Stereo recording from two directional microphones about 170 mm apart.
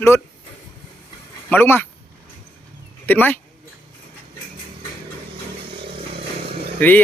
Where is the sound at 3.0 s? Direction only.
10° left (ahead or behind).